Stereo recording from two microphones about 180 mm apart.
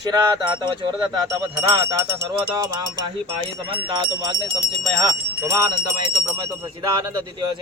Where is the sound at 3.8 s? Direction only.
25° right (ahead or behind).